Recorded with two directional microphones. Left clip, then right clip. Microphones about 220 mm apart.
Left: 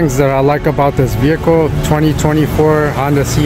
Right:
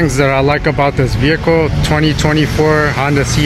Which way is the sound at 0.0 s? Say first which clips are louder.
Even; 10° left (ahead or behind).